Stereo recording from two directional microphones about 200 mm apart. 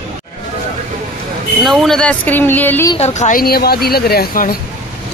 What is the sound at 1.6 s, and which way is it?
Speech, centre (ahead or behind).